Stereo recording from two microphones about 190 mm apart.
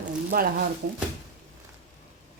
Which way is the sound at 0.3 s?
50° right (ahead or behind).